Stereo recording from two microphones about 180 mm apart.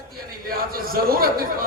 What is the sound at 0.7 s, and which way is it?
Speech, 55° right (ahead or behind).